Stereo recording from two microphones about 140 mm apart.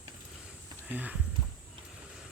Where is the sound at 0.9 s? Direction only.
10° right (ahead or behind).